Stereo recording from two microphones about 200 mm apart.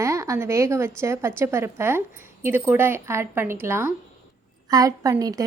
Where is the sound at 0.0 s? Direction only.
15° right (ahead or behind).